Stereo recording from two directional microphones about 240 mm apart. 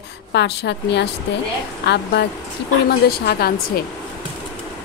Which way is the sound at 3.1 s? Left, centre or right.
Left.